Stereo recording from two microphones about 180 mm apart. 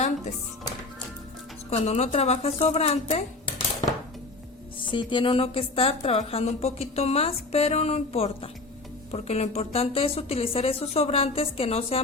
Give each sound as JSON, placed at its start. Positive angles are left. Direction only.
{"t": 1.7, "sound": "speech", "side_deg": 35}
{"t": 4.8, "sound": "speech", "side_deg": 25}